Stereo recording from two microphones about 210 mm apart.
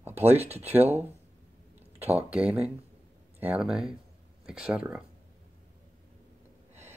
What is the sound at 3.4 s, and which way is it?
Speech, 5° right (ahead or behind).